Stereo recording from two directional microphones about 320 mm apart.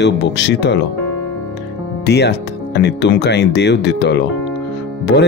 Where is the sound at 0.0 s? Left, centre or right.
Left.